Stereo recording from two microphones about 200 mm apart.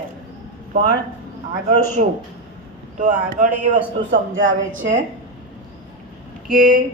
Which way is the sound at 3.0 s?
35° right (ahead or behind).